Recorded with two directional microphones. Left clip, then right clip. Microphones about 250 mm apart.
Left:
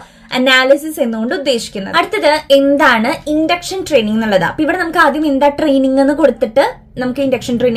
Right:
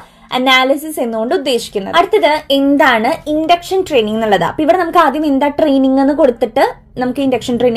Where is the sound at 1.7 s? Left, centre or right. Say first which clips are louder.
Right 3 dB; right.